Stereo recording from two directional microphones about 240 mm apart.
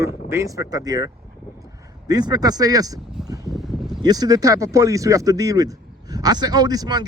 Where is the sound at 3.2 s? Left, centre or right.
Centre.